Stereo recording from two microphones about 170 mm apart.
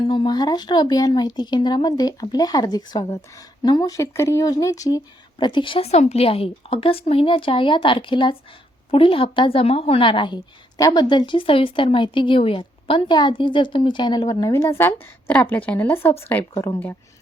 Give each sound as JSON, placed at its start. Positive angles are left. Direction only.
{"t": 0.0, "sound": "a woman's voice", "side_deg": 30}